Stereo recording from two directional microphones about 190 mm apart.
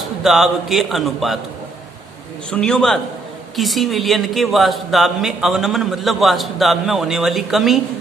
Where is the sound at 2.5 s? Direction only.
5° left (ahead or behind).